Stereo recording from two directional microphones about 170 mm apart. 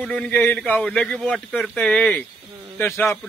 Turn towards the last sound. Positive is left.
turn(degrees=15)  # may be behind; listen again after turning